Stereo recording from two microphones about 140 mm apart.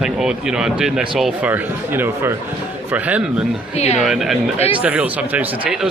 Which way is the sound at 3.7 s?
50° left (ahead or behind).